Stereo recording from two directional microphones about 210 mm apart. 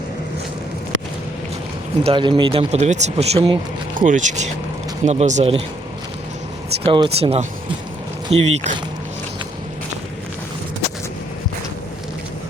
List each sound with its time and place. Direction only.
2.0 s speech: 25° right (ahead or behind)
3.9 s speech: 40° right (ahead or behind)
6.8 s speech: 25° right (ahead or behind)